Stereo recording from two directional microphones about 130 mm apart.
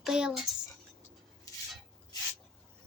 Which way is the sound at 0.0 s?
5° right (ahead or behind).